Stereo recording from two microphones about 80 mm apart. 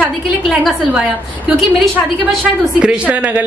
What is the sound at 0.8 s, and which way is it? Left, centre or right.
Speech, centre.